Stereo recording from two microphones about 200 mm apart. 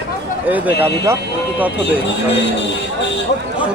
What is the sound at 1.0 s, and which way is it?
Speech, 10° right (ahead or behind).